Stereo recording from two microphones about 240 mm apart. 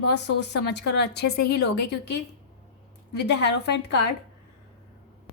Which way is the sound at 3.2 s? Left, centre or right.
Left.